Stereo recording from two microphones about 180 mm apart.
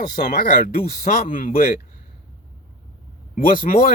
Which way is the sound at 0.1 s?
55° left (ahead or behind).